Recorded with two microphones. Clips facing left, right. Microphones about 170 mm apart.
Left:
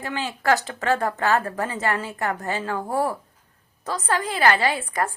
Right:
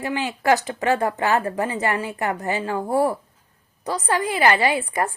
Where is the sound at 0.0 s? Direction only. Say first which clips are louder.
Right 3 dB; 15° right (ahead or behind).